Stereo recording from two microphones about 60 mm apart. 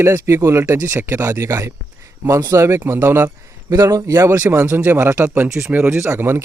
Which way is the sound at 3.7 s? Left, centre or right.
Right.